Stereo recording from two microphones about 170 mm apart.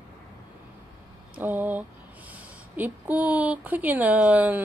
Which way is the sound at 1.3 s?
10° right (ahead or behind).